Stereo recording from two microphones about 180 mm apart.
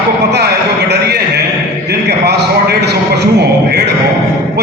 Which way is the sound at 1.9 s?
65° right (ahead or behind).